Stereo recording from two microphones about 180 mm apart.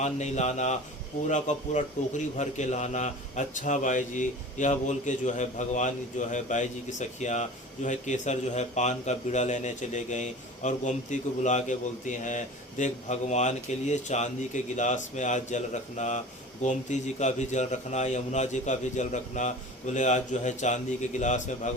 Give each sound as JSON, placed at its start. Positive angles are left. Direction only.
{"t": 0.0, "sound": "a man's voice", "side_deg": 40}